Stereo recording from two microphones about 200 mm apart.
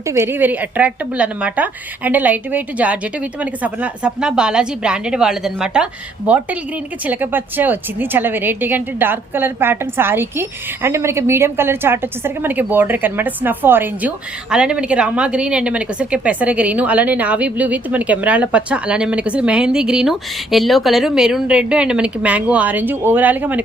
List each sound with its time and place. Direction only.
0.1 s a woman's voice: 10° right (ahead or behind)